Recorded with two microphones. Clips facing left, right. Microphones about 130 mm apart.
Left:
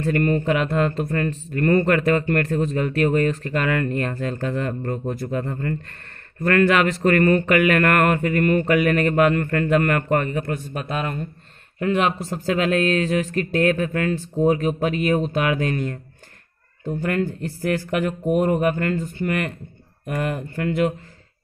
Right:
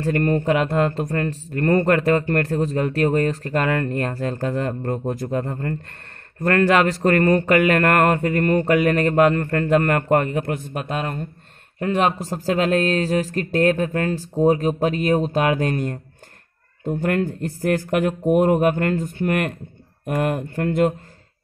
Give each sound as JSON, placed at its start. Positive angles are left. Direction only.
{"t": 0.0, "sound": "speech", "side_deg": -40}
{"t": 16.8, "sound": "speech", "side_deg": -55}